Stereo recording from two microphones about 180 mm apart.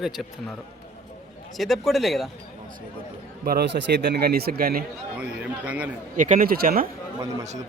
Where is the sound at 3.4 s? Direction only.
65° right (ahead or behind).